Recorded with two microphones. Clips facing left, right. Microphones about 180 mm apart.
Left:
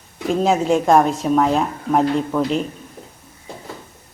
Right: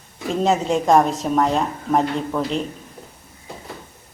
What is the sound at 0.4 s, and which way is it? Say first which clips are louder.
A woman's voice: left 1 dB; centre (ahead or behind).